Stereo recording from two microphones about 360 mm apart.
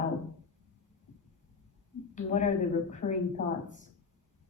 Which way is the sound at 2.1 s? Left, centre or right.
Centre.